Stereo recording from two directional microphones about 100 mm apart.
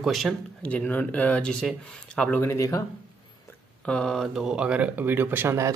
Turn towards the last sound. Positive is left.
turn(degrees=-25)  # may be behind; listen again after turning